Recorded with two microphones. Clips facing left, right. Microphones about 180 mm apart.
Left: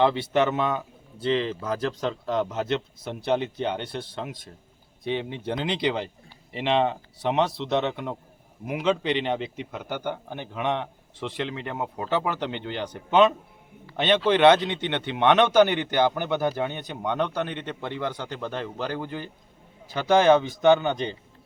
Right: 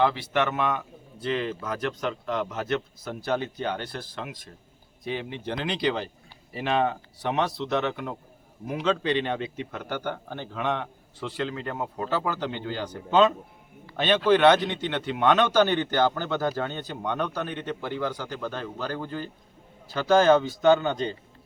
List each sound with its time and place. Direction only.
0.0 s a man's voice: 25° left (ahead or behind)